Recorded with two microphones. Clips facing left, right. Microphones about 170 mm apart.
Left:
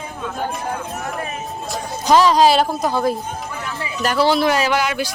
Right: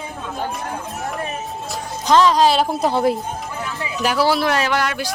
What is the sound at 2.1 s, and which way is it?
Speech, 10° left (ahead or behind).